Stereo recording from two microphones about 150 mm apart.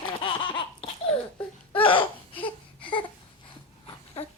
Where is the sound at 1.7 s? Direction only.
35° left (ahead or behind).